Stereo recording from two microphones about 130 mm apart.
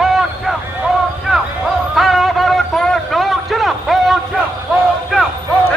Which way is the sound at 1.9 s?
Centre (ahead or behind).